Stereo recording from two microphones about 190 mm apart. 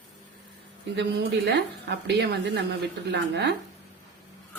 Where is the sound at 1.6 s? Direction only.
65° right (ahead or behind).